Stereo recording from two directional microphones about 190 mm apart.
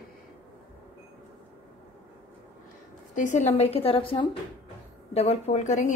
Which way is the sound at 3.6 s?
30° left (ahead or behind).